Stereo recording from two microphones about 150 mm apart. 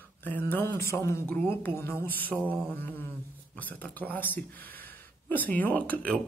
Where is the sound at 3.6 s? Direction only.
10° left (ahead or behind).